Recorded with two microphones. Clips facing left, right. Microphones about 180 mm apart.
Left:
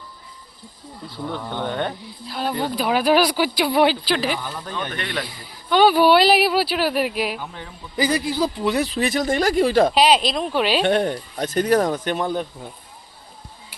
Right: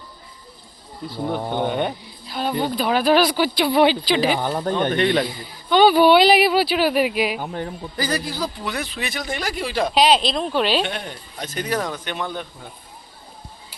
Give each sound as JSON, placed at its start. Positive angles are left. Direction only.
{"t": 1.5, "sound": "speech", "side_deg": -15}
{"t": 2.2, "sound": "speech", "side_deg": 0}
{"t": 4.3, "sound": "speech", "side_deg": -55}
{"t": 4.9, "sound": "a man's voice", "side_deg": -25}
{"t": 5.6, "sound": "speech", "side_deg": 5}
{"t": 7.3, "sound": "a man's voice", "side_deg": -50}
{"t": 7.9, "sound": "speech", "side_deg": 20}
{"t": 9.9, "sound": "speech", "side_deg": 5}
{"t": 10.8, "sound": "speech", "side_deg": 50}